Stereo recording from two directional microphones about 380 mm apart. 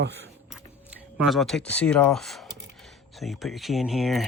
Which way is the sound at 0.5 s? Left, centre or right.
Centre.